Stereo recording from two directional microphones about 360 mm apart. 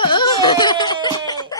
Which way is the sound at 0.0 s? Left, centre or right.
Centre.